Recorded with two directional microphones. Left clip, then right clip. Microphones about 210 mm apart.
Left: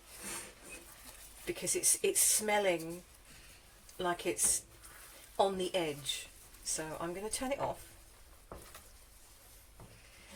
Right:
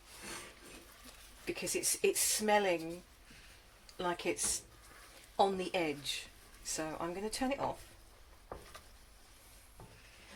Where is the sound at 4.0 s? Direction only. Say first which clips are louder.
Left 1 dB; 15° right (ahead or behind).